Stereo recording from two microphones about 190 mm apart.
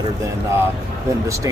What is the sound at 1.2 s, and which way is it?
Speech, 15° right (ahead or behind).